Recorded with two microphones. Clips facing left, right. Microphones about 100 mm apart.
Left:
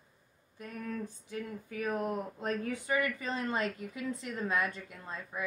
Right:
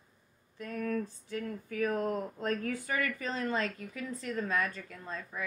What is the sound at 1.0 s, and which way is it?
Speech, 20° left (ahead or behind).